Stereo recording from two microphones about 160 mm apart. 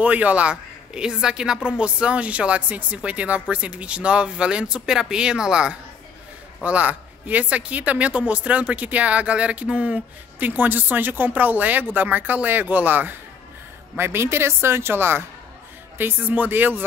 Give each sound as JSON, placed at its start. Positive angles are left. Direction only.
{"t": 0.0, "sound": "a woman's voice", "side_deg": -10}